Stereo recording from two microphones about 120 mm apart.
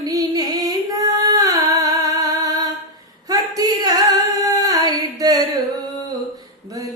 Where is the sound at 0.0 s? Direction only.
30° right (ahead or behind).